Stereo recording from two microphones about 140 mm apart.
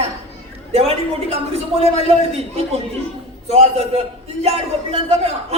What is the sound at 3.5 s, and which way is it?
Speech, 45° right (ahead or behind).